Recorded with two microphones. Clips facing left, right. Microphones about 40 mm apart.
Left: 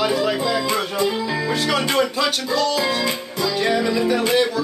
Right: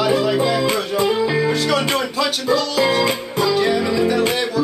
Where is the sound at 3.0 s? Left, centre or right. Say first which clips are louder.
Right 4 dB; right.